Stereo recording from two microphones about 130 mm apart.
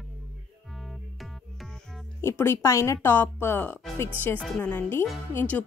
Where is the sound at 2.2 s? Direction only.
20° left (ahead or behind).